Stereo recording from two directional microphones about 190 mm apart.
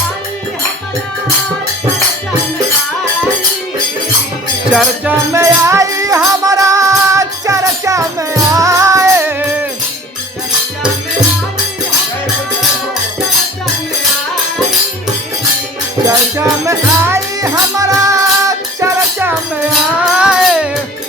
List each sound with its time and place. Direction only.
4.7 s music: centre (ahead or behind)
5.3 s music: 15° right (ahead or behind)
16.0 s music: 15° right (ahead or behind)